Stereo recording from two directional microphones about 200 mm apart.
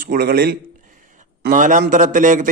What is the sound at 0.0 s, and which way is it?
A man's voice, 45° right (ahead or behind).